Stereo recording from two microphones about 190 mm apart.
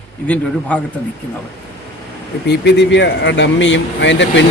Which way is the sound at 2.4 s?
65° left (ahead or behind).